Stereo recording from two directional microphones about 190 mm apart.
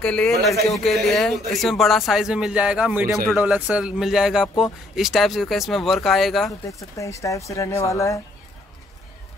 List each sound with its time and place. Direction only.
0.0 s speech: 5° left (ahead or behind)
6.7 s speech: 15° left (ahead or behind)